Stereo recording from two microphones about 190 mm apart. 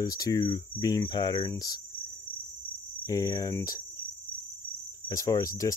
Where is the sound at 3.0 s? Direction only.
20° left (ahead or behind).